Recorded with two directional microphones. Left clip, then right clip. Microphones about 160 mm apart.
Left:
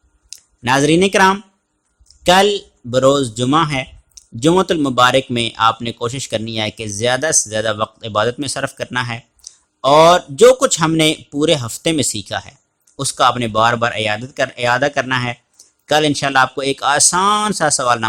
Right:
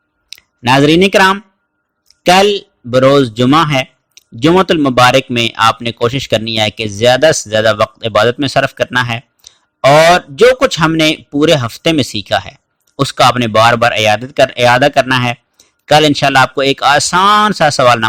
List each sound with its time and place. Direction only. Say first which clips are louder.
0.3 s speech: right 5 dB; 30° right (ahead or behind)